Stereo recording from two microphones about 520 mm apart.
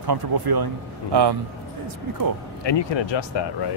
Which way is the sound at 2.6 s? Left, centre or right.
Left.